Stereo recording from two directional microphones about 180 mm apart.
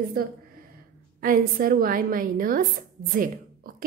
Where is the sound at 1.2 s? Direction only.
50° right (ahead or behind).